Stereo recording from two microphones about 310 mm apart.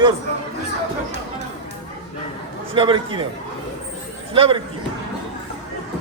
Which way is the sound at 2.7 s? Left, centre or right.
Centre.